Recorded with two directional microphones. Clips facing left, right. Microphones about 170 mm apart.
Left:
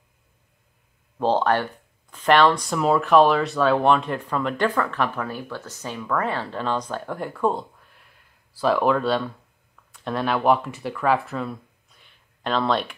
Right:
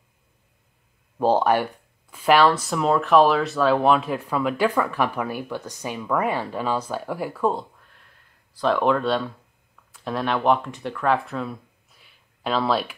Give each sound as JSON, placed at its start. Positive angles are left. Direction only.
{"t": 1.1, "sound": "speech", "side_deg": -10}